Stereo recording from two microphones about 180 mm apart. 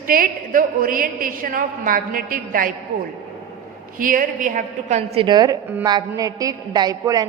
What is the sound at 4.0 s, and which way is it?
A woman's voice, 50° right (ahead or behind).